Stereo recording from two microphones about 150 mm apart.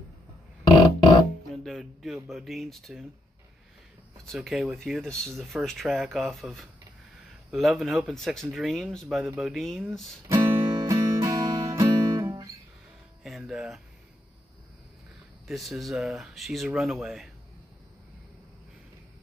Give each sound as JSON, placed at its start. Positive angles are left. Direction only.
{"t": 1.5, "sound": "speech", "side_deg": 0}
{"t": 4.4, "sound": "speech", "side_deg": 0}
{"t": 10.2, "sound": "music", "side_deg": -20}
{"t": 13.2, "sound": "speech", "side_deg": -5}
{"t": 15.4, "sound": "speech", "side_deg": 0}